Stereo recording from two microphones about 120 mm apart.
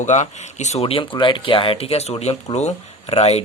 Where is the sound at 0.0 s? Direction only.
85° left.